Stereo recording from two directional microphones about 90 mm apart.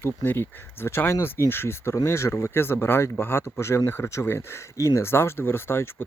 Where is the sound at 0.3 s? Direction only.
25° left (ahead or behind).